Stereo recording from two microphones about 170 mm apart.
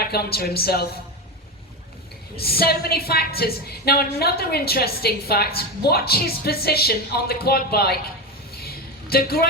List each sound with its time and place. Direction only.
0.0 s a woman's voice: 65° left (ahead or behind)
2.4 s a woman's voice: 65° left (ahead or behind)
8.5 s a sound: 65° left (ahead or behind)